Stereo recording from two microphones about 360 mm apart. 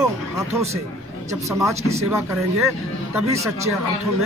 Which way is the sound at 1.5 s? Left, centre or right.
Centre.